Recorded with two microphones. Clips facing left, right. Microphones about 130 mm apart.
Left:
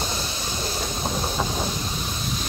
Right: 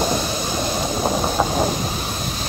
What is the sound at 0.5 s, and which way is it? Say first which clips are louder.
Vehicle: right 5 dB; 90° right.